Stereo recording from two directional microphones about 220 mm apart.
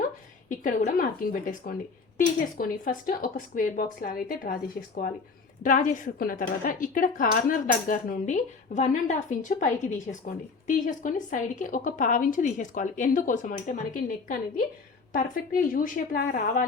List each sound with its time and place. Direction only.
0.0 s a woman's voice: 35° left (ahead or behind)
5.6 s a woman's voice: 35° left (ahead or behind)